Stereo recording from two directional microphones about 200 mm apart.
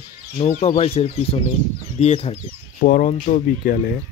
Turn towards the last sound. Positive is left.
turn(degrees=45)  # may be behind; listen again after turning